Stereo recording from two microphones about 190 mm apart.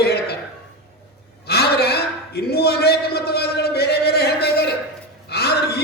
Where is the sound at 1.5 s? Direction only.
55° left (ahead or behind).